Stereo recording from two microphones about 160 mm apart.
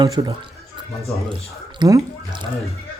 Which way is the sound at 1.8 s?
25° right (ahead or behind).